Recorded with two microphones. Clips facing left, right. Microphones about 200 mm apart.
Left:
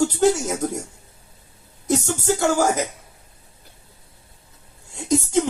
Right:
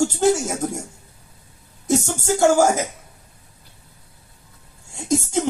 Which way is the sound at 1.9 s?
50° right (ahead or behind).